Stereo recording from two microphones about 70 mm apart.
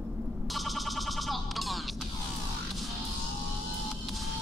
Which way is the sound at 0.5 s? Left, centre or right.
Centre.